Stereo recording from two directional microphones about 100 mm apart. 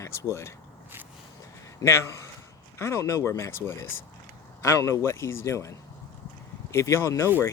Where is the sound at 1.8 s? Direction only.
25° left (ahead or behind).